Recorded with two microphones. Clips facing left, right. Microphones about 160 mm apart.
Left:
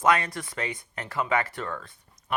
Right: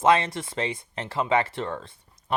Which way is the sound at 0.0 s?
25° right (ahead or behind).